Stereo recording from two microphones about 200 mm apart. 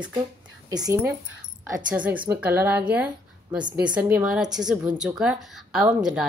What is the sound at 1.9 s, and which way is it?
A woman's voice, 5° right (ahead or behind).